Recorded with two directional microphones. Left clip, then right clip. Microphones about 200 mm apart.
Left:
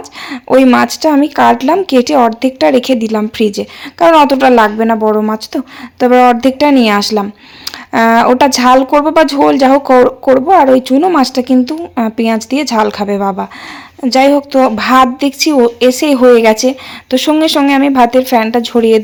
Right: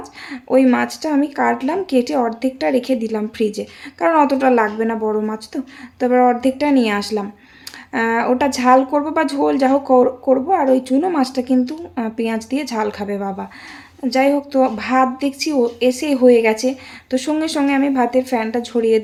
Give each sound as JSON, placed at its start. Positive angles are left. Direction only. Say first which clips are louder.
{"t": 0.3, "sound": "speech", "louder": "left 7 dB", "side_deg": 30}